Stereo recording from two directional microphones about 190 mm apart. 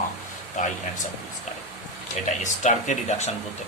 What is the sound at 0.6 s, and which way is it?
Speech, 40° left (ahead or behind).